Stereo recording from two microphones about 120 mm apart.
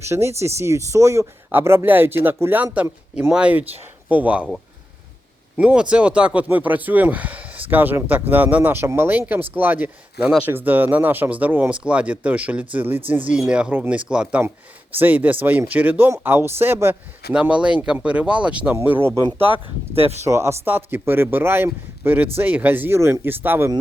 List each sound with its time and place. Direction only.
0.0 s speech: 20° right (ahead or behind)
5.5 s speech: 10° right (ahead or behind)
20.2 s speech: 25° right (ahead or behind)